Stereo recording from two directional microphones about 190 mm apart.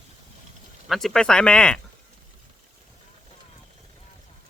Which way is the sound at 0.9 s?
Centre (ahead or behind).